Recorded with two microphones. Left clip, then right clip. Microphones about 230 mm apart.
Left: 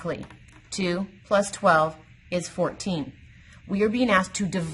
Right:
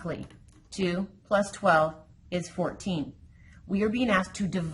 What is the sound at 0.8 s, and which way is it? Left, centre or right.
A woman's voice, left.